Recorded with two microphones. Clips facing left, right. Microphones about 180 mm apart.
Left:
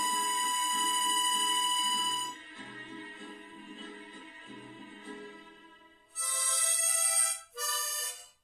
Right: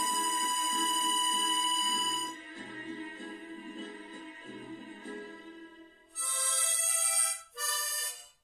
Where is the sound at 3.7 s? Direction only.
40° right (ahead or behind).